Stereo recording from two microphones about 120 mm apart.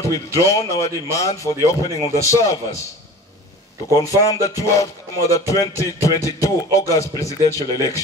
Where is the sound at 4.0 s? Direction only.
30° left (ahead or behind).